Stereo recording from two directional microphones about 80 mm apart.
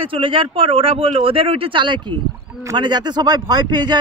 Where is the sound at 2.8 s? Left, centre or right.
Right.